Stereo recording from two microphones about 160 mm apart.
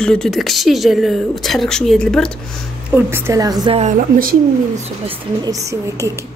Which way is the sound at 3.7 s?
45° right (ahead or behind).